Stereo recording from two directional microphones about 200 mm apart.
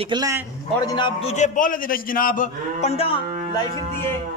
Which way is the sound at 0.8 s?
20° left (ahead or behind).